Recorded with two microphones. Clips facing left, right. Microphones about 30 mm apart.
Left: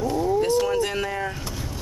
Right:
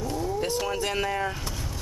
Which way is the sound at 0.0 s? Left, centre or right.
Centre.